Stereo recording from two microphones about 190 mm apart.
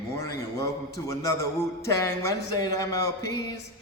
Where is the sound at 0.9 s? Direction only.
15° left (ahead or behind).